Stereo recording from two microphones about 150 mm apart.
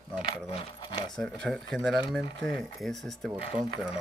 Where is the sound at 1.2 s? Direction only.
5° left (ahead or behind).